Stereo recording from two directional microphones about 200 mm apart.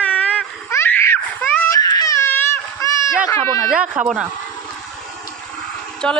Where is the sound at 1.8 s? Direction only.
20° left (ahead or behind).